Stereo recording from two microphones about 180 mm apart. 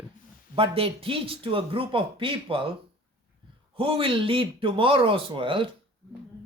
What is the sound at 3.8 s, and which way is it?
Speech, 30° right (ahead or behind).